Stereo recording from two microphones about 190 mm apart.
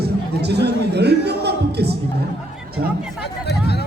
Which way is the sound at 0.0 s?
60° right (ahead or behind).